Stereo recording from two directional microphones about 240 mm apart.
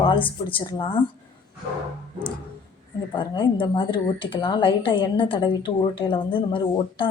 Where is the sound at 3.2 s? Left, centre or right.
Centre.